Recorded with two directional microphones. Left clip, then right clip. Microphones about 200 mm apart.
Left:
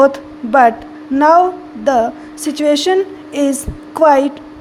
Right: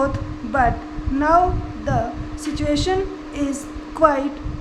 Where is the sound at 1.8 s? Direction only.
40° left (ahead or behind).